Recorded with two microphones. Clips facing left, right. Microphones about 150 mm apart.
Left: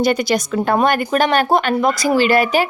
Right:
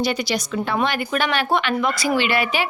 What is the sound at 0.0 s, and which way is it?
A woman's voice, 50° left (ahead or behind).